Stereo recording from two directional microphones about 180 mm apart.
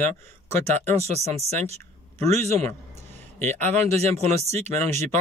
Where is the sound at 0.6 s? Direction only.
35° right (ahead or behind).